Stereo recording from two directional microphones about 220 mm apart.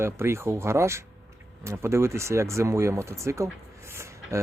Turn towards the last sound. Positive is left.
turn(degrees=-10)  # may be behind; listen again after turning